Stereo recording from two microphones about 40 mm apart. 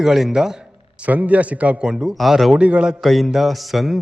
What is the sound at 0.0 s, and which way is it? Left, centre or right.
Speech, centre.